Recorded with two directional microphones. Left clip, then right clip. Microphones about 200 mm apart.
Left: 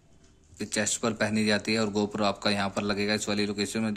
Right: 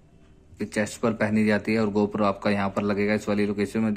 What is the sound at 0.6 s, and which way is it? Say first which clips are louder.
Speech: right 2 dB; 10° left (ahead or behind).